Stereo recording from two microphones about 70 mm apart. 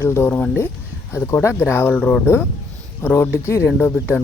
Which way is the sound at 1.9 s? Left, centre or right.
Centre.